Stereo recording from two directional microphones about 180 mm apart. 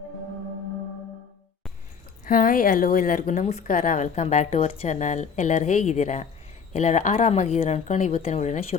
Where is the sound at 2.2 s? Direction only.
50° left (ahead or behind).